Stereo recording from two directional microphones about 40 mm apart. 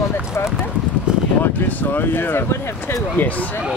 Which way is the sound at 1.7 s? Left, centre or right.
Left.